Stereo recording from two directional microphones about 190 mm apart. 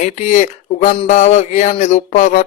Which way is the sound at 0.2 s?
40° left (ahead or behind).